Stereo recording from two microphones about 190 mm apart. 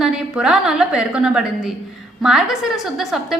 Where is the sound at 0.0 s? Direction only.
5° right (ahead or behind).